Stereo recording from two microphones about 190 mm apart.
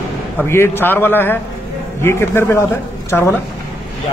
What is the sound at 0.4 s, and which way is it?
A man's voice, 10° left (ahead or behind).